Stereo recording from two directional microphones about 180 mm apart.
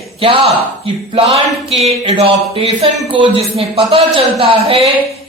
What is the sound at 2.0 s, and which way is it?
A man's voice, 30° right (ahead or behind).